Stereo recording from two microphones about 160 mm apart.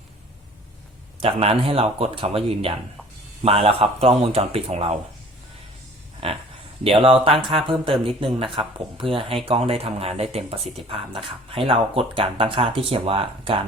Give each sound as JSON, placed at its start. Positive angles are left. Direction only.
{"t": 1.2, "sound": "speech", "side_deg": -35}
{"t": 6.2, "sound": "speech", "side_deg": -35}